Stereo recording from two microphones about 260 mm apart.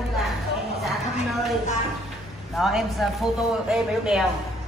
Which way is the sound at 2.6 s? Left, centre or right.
Centre.